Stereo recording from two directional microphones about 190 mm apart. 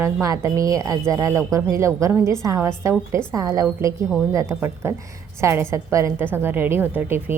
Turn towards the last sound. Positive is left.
turn(degrees=-10)  # may be behind; listen again after turning